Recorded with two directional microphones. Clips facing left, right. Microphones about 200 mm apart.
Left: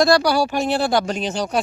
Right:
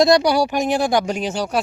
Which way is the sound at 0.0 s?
20° right (ahead or behind).